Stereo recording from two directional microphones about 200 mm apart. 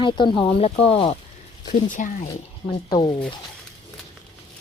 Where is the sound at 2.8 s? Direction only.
20° left (ahead or behind).